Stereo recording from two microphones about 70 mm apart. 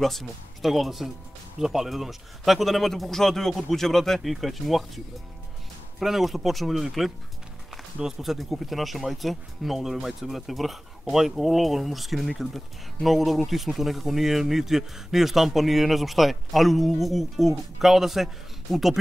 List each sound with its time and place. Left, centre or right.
0.0 s speech: centre